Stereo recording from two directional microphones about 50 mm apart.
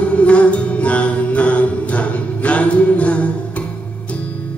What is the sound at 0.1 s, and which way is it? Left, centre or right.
Music, left.